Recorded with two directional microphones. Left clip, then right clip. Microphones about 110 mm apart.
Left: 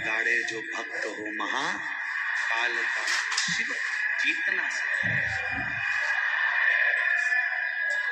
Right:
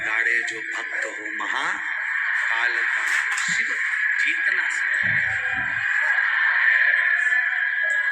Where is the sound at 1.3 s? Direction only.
10° left (ahead or behind).